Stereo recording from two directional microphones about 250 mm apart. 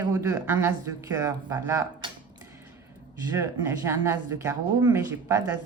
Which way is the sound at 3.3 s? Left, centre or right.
Centre.